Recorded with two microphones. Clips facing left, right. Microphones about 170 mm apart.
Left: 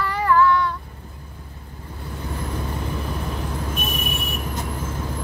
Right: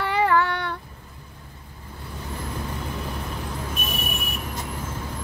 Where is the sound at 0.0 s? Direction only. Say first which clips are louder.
Left 2 dB; 75° right (ahead or behind).